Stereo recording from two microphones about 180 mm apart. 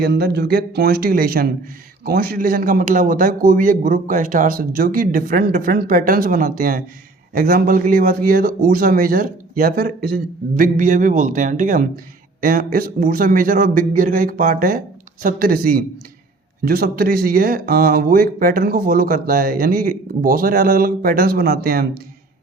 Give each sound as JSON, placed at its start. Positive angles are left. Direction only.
{"t": 0.0, "sound": "speech", "side_deg": -65}